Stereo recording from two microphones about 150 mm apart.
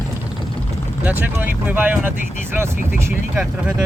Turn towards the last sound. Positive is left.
turn(degrees=-5)  # may be behind; listen again after turning